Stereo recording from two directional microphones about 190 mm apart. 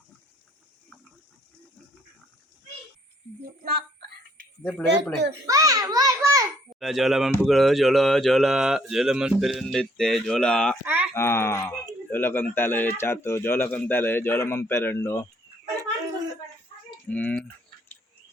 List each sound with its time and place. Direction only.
3.6 s speech: 50° right (ahead or behind)
4.6 s speech: centre (ahead or behind)
5.5 s a sound: 15° right (ahead or behind)
6.7 s speech: centre (ahead or behind)
10.8 s a sound: 10° right (ahead or behind)
11.1 s speech: 15° left (ahead or behind)
17.1 s speech: 5° left (ahead or behind)